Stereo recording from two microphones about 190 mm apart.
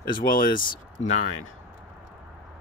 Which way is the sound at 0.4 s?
45° left (ahead or behind).